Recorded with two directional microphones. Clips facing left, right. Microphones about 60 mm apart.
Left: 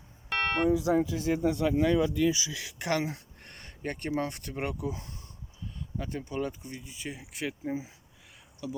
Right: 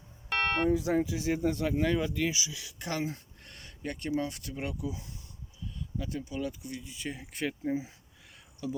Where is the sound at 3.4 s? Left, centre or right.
Left.